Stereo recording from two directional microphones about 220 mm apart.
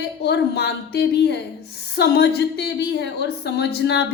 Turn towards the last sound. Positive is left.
turn(degrees=50)  # may be behind; listen again after turning